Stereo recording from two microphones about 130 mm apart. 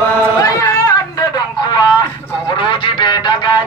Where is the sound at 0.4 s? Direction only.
25° left (ahead or behind).